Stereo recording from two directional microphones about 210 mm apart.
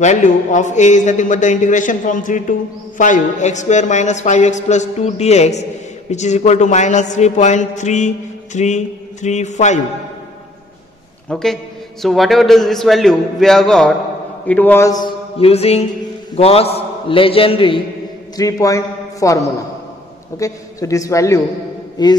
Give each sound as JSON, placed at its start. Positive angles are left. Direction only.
{"t": 0.0, "sound": "speech", "side_deg": 35}
{"t": 11.2, "sound": "a man's voice", "side_deg": 5}
{"t": 15.3, "sound": "music", "side_deg": 30}
{"t": 16.3, "sound": "a man's voice", "side_deg": 30}
{"t": 22.0, "sound": "music", "side_deg": 20}